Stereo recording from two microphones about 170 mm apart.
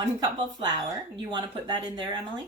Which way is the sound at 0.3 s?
25° right (ahead or behind).